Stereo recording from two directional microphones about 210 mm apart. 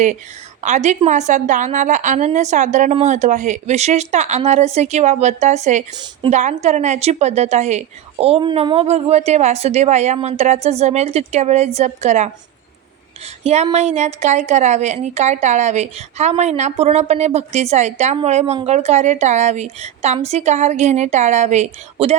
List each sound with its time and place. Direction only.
0.6 s a woman's voice: 35° right (ahead or behind)
13.4 s a woman's voice: 30° right (ahead or behind)